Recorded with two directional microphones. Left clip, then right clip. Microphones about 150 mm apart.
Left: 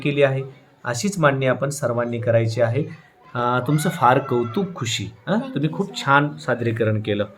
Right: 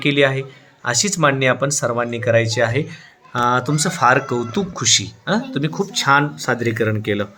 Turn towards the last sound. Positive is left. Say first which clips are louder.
# right 2 dB
turn(degrees=-20)  # may be behind; listen again after turning